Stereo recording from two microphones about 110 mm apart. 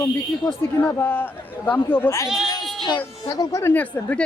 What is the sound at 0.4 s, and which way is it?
A man's voice, 20° left (ahead or behind).